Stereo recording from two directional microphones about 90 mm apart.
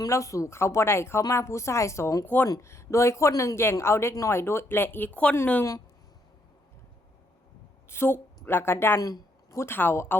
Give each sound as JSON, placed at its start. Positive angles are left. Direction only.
{"t": 0.0, "sound": "speech", "side_deg": 35}
{"t": 2.2, "sound": "speech", "side_deg": 20}
{"t": 2.5, "sound": "speech", "side_deg": 35}
{"t": 7.9, "sound": "speech", "side_deg": 25}
{"t": 9.0, "sound": "speech", "side_deg": 40}